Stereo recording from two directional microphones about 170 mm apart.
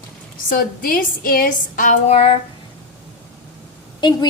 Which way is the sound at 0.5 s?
60° left (ahead or behind).